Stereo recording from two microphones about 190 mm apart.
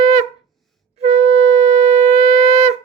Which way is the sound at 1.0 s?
35° right (ahead or behind).